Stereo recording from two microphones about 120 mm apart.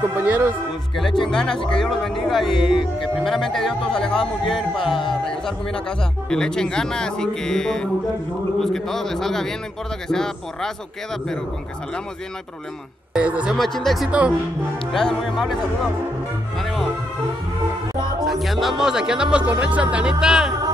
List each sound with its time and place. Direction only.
0.1 s speech: 15° right (ahead or behind)
0.9 s speech: centre (ahead or behind)
13.1 s speech: 10° right (ahead or behind)
13.6 s speech: centre (ahead or behind)
18.2 s speech: centre (ahead or behind)